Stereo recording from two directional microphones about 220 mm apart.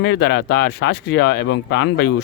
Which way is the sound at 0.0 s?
50° left (ahead or behind).